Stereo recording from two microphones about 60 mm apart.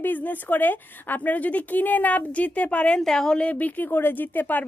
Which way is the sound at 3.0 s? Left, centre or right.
Centre.